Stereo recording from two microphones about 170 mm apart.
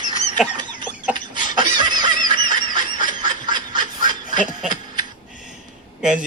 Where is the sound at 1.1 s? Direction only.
25° right (ahead or behind).